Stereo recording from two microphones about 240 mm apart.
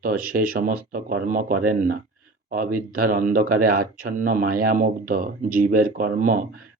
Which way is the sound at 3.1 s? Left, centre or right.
Right.